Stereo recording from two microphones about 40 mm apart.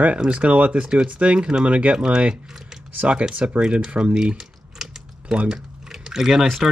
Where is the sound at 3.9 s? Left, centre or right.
Right.